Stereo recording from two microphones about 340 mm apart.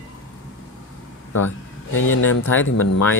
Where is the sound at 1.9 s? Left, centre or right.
Left.